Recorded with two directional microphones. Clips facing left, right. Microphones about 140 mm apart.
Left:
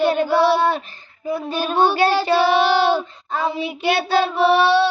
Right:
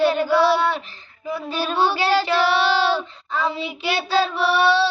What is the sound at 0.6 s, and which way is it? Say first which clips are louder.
Child singing: left 3 dB; 45° left (ahead or behind).